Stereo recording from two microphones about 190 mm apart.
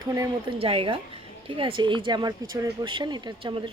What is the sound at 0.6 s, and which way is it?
A woman's voice, 30° right (ahead or behind).